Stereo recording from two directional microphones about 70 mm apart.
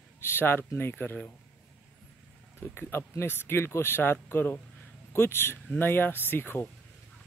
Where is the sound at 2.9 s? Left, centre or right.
Left.